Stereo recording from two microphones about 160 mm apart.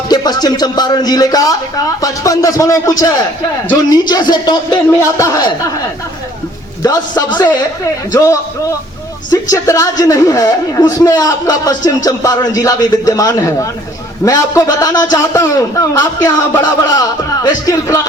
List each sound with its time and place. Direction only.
0.1 s a man's voice: 25° left (ahead or behind)
6.8 s a man's voice: 25° left (ahead or behind)